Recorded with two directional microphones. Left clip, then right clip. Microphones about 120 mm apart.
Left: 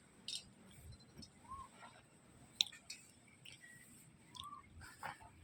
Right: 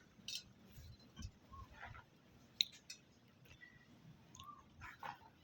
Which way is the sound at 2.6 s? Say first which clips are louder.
Left 1 dB; 10° right (ahead or behind).